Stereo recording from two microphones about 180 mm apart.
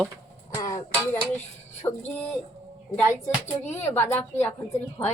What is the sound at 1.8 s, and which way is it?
Speech, 20° left (ahead or behind).